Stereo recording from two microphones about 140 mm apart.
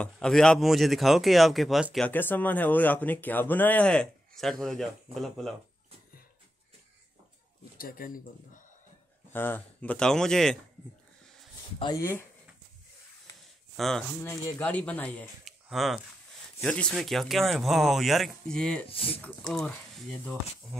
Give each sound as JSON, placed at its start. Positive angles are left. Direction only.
{"t": 0.0, "sound": "speech", "side_deg": 5}
{"t": 2.0, "sound": "speech", "side_deg": 15}
{"t": 7.7, "sound": "speech", "side_deg": 90}
{"t": 9.3, "sound": "speech", "side_deg": 15}
{"t": 12.0, "sound": "speech", "side_deg": 20}
{"t": 13.7, "sound": "speech", "side_deg": 0}
{"t": 14.2, "sound": "speech", "side_deg": 15}
{"t": 15.4, "sound": "a sound", "side_deg": 0}
{"t": 16.6, "sound": "speech", "side_deg": 10}
{"t": 18.9, "sound": "speech", "side_deg": 40}
{"t": 19.2, "sound": "speech", "side_deg": 5}